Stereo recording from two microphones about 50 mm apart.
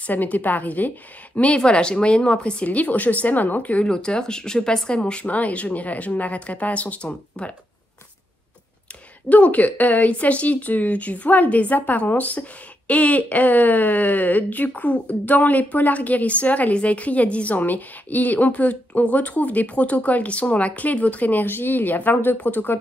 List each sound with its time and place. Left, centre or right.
0.0 s a woman's voice: left
2.6 s a woman's voice: left
3.8 s speech: centre
9.3 s a woman's voice: left